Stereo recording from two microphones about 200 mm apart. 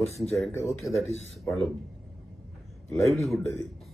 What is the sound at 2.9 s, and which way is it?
Speech, 15° left (ahead or behind).